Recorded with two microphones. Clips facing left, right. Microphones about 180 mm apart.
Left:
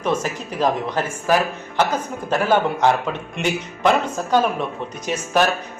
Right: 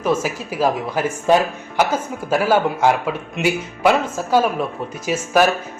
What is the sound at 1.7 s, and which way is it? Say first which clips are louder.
Speech: right 2 dB; 10° right (ahead or behind).